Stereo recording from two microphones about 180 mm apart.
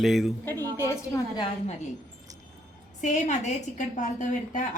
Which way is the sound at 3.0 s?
40° left (ahead or behind).